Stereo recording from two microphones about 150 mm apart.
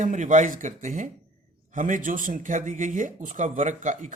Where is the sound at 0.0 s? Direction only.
60° right (ahead or behind).